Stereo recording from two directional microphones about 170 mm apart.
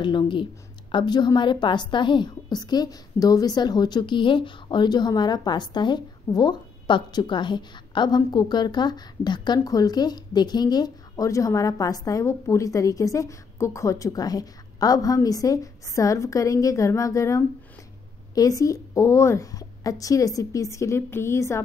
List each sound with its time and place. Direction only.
0.0 s a woman's voice: 25° left (ahead or behind)